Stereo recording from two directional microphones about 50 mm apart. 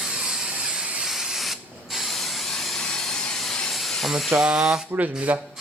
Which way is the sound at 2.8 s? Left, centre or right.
Centre.